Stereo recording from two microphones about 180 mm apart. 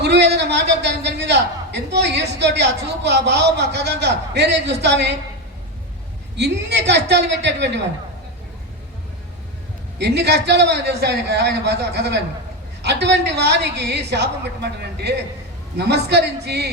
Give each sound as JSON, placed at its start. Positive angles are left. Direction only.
{"t": 0.0, "sound": "a man's voice", "side_deg": -70}
{"t": 6.3, "sound": "a man's voice", "side_deg": -70}
{"t": 10.0, "sound": "a man's voice", "side_deg": -65}